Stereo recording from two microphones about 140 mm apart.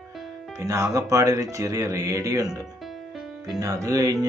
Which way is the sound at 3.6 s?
25° right (ahead or behind).